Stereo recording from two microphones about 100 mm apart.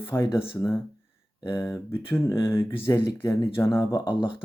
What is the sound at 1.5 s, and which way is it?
Speech, 30° left (ahead or behind).